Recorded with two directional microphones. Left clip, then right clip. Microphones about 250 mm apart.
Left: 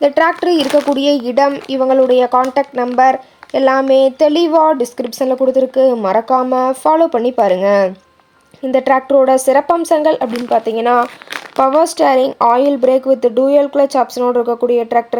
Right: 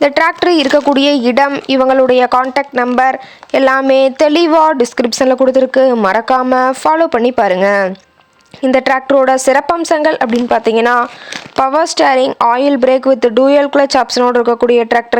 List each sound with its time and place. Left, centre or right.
0.0 s speech: right